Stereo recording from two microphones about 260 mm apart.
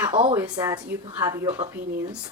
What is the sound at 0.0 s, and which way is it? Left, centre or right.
A woman's voice, centre.